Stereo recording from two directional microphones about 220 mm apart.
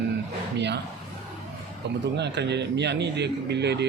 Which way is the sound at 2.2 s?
50° right (ahead or behind).